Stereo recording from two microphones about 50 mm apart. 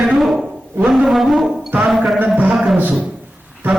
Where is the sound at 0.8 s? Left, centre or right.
Right.